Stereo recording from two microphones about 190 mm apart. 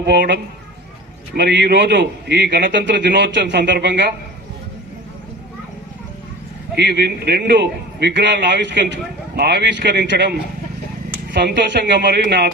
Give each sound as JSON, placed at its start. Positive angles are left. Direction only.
{"t": 0.0, "sound": "a man's voice", "side_deg": -65}
{"t": 1.4, "sound": "a man's voice", "side_deg": -60}
{"t": 6.7, "sound": "a man's voice", "side_deg": -60}